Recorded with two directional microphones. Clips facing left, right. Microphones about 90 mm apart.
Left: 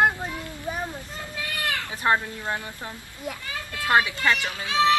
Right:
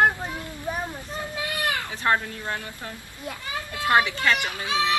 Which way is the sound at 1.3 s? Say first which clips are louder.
Right 1 dB; 20° right (ahead or behind).